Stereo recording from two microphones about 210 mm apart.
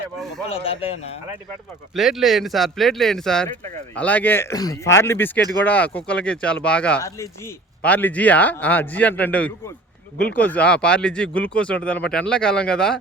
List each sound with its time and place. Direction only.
0.5 s speech: 25° left (ahead or behind)
2.0 s speech: centre (ahead or behind)